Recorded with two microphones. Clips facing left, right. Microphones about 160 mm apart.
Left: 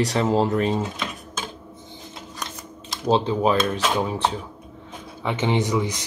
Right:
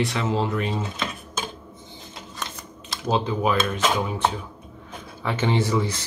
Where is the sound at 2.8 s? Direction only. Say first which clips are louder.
Left 4 dB; 15° left (ahead or behind).